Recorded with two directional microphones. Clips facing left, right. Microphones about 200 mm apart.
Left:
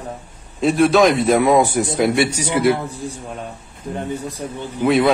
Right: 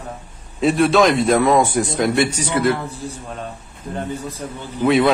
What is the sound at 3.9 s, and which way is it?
Speech, 10° left (ahead or behind).